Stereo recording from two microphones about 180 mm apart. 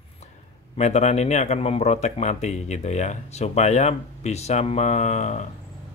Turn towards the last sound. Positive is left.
turn(degrees=40)  # may be behind; listen again after turning